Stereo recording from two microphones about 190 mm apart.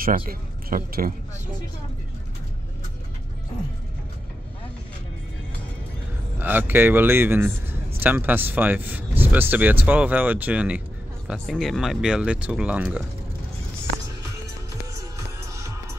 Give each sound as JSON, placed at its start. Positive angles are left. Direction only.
{"t": 0.3, "sound": "speech", "side_deg": -50}
{"t": 6.3, "sound": "speech", "side_deg": -10}
{"t": 15.0, "sound": "music", "side_deg": -15}